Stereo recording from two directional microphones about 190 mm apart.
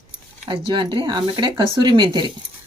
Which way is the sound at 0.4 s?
25° right (ahead or behind).